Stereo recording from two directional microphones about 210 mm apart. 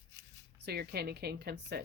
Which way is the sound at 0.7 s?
50° right (ahead or behind).